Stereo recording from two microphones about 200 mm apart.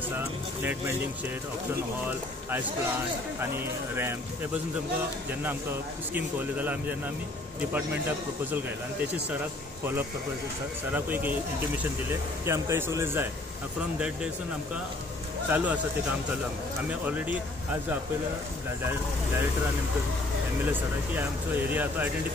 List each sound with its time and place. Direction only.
3.3 s speech: 10° right (ahead or behind)
6.1 s speech: 10° right (ahead or behind)
10.9 s speech: 10° right (ahead or behind)
15.5 s speech: 5° right (ahead or behind)
17.0 s speech: 10° right (ahead or behind)
21.2 s speech: 10° right (ahead or behind)